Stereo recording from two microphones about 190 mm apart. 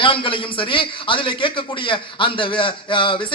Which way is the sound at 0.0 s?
25° left (ahead or behind).